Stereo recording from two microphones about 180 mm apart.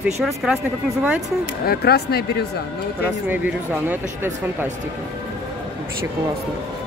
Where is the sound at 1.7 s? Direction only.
60° left (ahead or behind).